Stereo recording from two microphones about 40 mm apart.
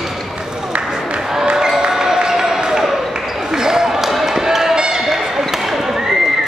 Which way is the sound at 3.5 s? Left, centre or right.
Centre.